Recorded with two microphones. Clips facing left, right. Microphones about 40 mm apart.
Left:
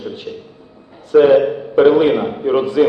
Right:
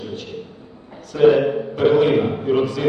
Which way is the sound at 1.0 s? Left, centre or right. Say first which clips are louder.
Left 4 dB; left.